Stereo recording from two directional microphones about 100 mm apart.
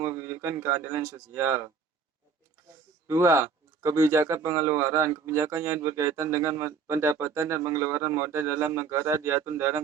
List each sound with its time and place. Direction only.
0.0 s speech: 30° right (ahead or behind)
3.1 s speech: 30° right (ahead or behind)